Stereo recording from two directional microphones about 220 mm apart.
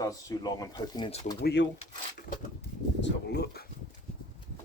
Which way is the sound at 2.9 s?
50° left (ahead or behind).